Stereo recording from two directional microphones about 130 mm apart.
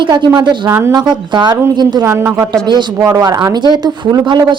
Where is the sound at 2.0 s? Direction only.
20° right (ahead or behind).